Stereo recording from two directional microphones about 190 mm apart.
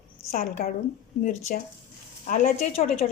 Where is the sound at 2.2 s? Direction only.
40° left (ahead or behind).